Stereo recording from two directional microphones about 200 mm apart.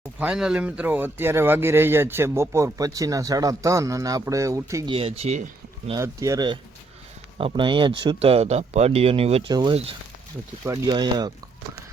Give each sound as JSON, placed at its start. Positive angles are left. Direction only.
{"t": 0.2, "sound": "speech", "side_deg": -5}
{"t": 4.9, "sound": "speech", "side_deg": -30}
{"t": 5.9, "sound": "speech", "side_deg": -15}